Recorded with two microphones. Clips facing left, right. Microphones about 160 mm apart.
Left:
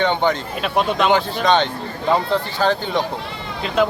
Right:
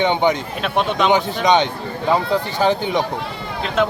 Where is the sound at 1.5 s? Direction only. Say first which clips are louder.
Right 2 dB; 15° right (ahead or behind).